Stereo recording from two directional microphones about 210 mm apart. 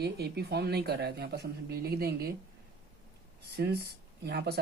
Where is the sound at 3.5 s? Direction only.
50° right (ahead or behind).